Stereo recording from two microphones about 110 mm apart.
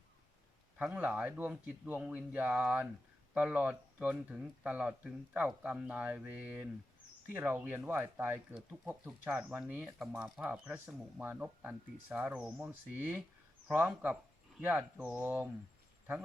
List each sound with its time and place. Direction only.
0.8 s speech: 15° right (ahead or behind)